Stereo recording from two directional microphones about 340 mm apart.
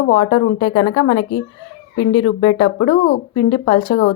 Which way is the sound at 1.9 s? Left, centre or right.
Left.